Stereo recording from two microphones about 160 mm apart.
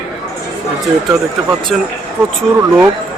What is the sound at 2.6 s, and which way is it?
Speech, 15° right (ahead or behind).